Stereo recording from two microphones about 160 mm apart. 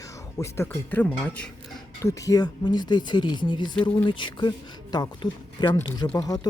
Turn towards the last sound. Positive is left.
turn(degrees=25)  # may be behind; listen again after turning